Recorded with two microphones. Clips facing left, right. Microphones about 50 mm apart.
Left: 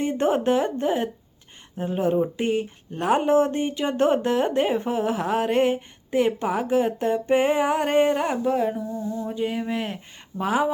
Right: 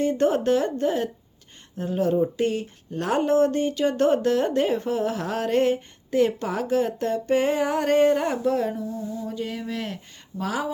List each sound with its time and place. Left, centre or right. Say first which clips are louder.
0.0 s speech: right 1 dB; centre